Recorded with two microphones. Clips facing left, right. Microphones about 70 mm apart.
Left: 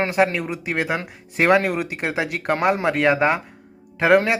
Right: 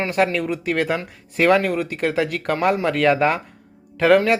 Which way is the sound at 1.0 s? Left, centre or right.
Left.